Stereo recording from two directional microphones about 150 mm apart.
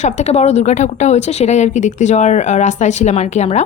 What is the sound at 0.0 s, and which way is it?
Speech, 50° left (ahead or behind).